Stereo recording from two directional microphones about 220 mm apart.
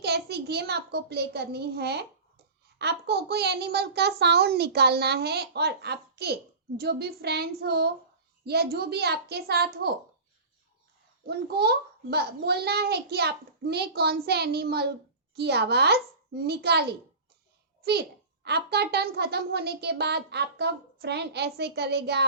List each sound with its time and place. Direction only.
0.0 s a child's voice: 50° right (ahead or behind)
11.3 s a child's voice: 45° right (ahead or behind)
18.4 s a child's voice: 50° right (ahead or behind)